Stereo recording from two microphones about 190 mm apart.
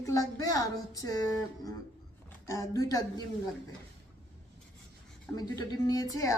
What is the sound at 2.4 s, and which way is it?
Speech, 15° left (ahead or behind).